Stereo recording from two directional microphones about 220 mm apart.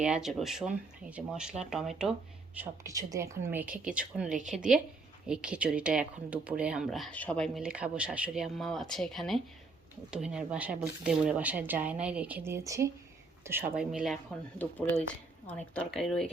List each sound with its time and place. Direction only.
0.0 s speech: 5° right (ahead or behind)
2.6 s speech: 15° right (ahead or behind); by 16.3 s centre (ahead or behind)